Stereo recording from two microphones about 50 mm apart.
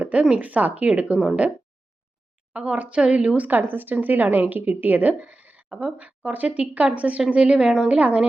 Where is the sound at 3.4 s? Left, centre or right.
Right.